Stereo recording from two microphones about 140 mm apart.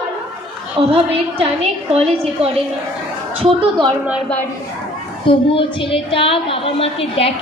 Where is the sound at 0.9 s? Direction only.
40° right (ahead or behind).